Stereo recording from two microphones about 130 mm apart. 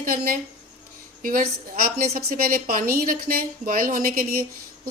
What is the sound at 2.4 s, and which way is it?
Speech, 90° right.